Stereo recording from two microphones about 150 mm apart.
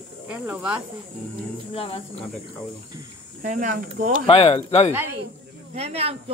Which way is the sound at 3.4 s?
60° right (ahead or behind).